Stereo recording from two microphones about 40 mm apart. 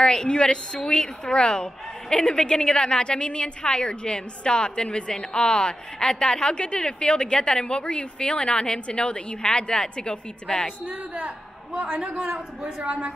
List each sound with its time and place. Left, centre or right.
0.0 s a woman's voice: left
10.9 s a man's voice: right
11.9 s a man's voice: right